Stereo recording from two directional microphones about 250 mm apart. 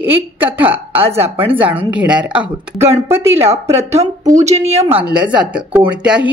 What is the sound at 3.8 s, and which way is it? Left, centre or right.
Speech, right.